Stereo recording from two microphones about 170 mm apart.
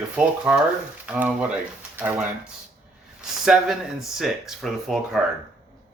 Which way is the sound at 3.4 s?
Centre (ahead or behind).